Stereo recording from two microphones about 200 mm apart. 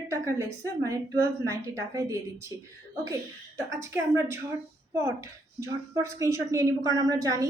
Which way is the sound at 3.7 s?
15° right (ahead or behind).